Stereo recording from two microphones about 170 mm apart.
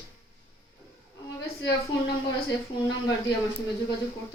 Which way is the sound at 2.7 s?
30° left (ahead or behind).